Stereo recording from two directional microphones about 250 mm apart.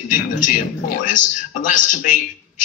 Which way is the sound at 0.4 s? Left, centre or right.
Left.